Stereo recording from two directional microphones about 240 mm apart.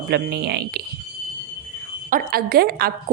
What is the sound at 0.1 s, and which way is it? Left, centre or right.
Speech, right.